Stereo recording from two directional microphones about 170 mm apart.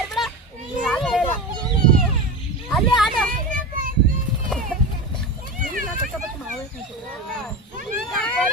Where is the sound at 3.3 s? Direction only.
50° right (ahead or behind).